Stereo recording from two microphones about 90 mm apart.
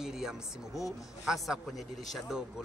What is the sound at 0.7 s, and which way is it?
Speech, 35° left (ahead or behind).